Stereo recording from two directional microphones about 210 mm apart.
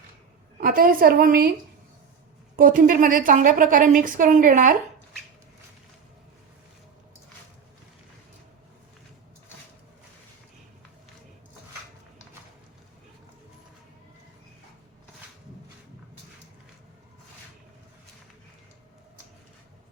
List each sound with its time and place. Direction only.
0.6 s a woman's voice: 45° right (ahead or behind)
2.6 s a woman's voice: 40° right (ahead or behind)